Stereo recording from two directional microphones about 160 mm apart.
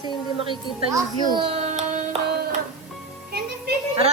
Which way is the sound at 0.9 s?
25° right (ahead or behind).